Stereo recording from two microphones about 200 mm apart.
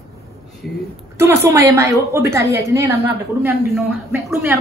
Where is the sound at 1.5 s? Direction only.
15° right (ahead or behind).